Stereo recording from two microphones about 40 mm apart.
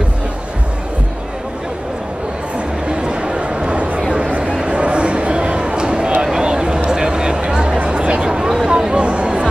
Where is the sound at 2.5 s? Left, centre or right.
Right.